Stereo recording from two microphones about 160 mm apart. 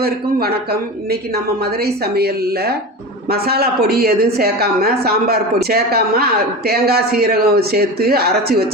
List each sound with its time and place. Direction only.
0.0 s speech: 75° right (ahead or behind)
1.8 s speech: 80° right